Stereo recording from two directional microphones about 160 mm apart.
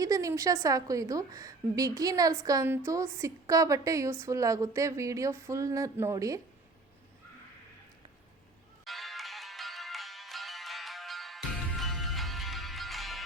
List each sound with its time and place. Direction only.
0.0 s a woman's voice: 20° right (ahead or behind)
8.8 s music: centre (ahead or behind)